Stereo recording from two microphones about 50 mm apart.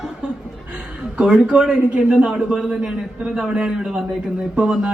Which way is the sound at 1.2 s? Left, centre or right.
Centre.